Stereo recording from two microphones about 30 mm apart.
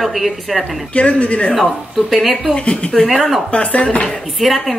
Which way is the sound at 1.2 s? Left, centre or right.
Left.